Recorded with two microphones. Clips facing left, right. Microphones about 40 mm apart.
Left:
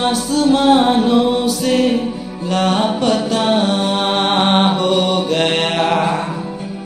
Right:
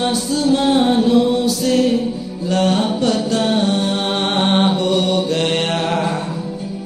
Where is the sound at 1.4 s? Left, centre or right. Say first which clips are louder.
Left 1 dB; left.